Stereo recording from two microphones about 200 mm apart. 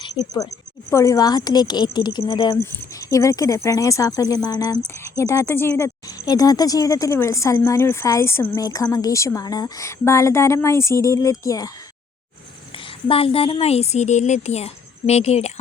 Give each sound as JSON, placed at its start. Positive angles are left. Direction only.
{"t": 0.1, "sound": "speech", "side_deg": 20}
{"t": 12.7, "sound": "a woman's voice", "side_deg": 30}